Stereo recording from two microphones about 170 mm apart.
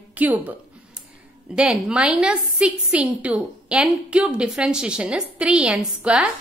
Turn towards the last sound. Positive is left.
turn(degrees=-5)  # may be behind; listen again after turning